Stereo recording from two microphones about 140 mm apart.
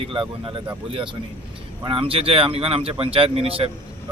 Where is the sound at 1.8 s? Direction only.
40° right (ahead or behind).